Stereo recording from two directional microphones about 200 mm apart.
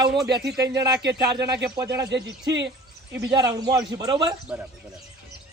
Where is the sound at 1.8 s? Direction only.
60° right (ahead or behind).